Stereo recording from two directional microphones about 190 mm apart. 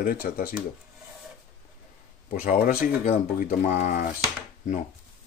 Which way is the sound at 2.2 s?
45° left (ahead or behind).